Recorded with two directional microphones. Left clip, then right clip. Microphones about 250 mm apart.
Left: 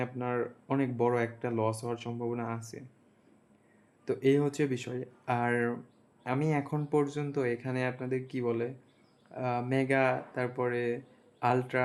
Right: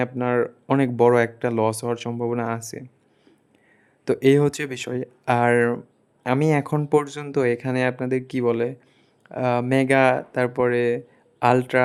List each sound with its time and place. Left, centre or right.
0.0 s speech: right
4.0 s speech: right